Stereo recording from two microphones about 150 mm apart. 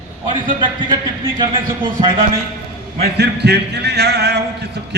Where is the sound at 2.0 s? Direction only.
35° right (ahead or behind).